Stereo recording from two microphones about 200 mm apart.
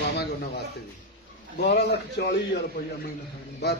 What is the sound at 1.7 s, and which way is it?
Speech, 55° left (ahead or behind).